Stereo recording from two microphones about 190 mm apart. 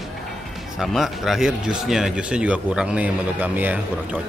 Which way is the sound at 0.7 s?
Centre (ahead or behind).